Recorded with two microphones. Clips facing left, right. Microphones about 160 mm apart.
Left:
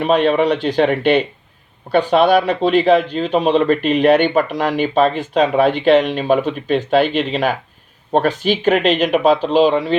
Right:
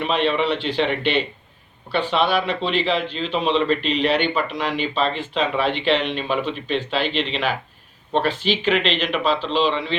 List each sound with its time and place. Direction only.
0.0 s speech: 45° left (ahead or behind)